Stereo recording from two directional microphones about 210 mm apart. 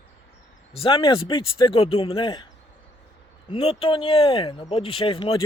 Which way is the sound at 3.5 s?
25° left (ahead or behind).